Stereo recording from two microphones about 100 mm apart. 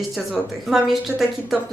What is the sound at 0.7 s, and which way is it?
Speech, 5° right (ahead or behind).